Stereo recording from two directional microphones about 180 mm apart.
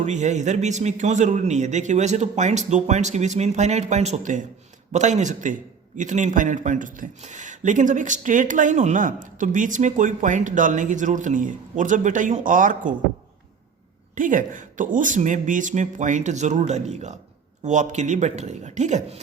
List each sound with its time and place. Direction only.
0.0 s a man's voice: 40° right (ahead or behind)
14.2 s a man's voice: 45° right (ahead or behind)